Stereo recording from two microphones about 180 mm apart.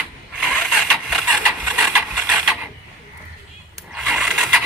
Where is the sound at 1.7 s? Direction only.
Centre (ahead or behind).